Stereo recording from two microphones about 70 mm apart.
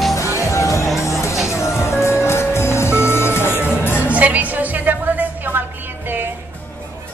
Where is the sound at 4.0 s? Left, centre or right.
Right.